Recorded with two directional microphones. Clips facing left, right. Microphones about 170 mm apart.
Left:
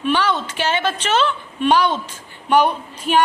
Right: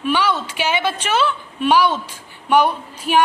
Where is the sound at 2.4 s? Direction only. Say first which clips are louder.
Even; 10° right (ahead or behind).